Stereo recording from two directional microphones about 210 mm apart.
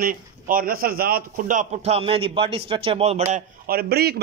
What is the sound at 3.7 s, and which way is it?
Speech, 45° right (ahead or behind).